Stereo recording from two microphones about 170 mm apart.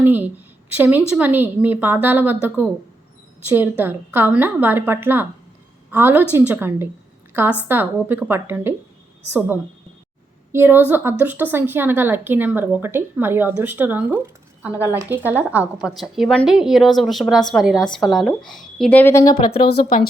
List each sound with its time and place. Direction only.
0.0 s a woman's voice: 10° right (ahead or behind)
10.5 s a woman's voice: 15° right (ahead or behind); by 19.3 s 15° left (ahead or behind)
19.5 s speech: 60° left (ahead or behind)